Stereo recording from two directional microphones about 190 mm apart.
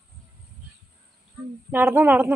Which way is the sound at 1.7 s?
10° right (ahead or behind).